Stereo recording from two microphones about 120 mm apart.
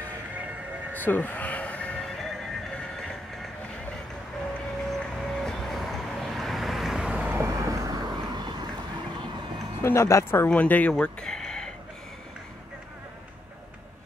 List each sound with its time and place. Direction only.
0.9 s music: 15° left (ahead or behind)
4.9 s vehicle: 5° left (ahead or behind); by 7.4 s 15° right (ahead or behind)
7.4 s vehicle: 25° right (ahead or behind)
9.8 s speech: 20° left (ahead or behind); by 11.7 s 5° left (ahead or behind)